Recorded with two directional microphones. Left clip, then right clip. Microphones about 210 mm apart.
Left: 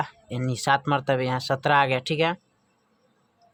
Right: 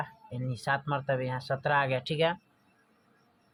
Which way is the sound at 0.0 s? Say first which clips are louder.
Left 8 dB; 35° left (ahead or behind).